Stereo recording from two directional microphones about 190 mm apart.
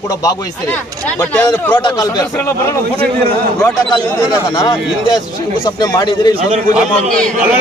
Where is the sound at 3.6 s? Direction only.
20° left (ahead or behind).